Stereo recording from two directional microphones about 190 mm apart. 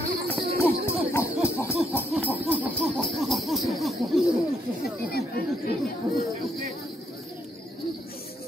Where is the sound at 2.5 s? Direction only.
10° right (ahead or behind).